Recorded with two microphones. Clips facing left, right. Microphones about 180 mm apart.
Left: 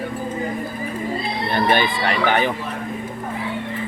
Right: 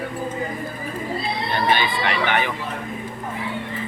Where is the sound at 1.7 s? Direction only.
45° left (ahead or behind).